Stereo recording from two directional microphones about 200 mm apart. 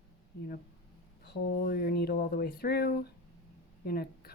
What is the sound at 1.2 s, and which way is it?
Speech, 55° left (ahead or behind).